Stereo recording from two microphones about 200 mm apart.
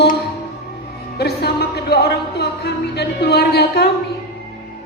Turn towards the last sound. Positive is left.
turn(degrees=55)  # may be behind; listen again after turning